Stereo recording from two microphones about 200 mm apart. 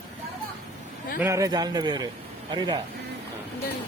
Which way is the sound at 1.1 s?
15° right (ahead or behind).